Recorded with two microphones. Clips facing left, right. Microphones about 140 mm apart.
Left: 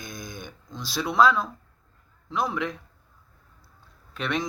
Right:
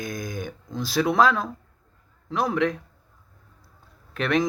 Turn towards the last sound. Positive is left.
turn(degrees=-50)  # may be behind; listen again after turning